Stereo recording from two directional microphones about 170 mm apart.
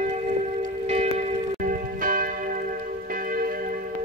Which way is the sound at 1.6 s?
55° right (ahead or behind).